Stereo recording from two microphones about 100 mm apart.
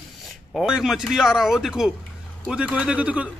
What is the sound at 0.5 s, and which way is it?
A man's voice, 5° right (ahead or behind).